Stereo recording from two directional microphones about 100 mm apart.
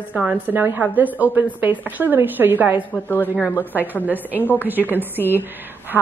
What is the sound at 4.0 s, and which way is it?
A woman's voice, 15° right (ahead or behind).